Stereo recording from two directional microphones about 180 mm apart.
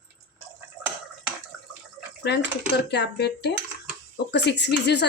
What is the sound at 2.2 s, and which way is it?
A woman's voice, 70° left (ahead or behind).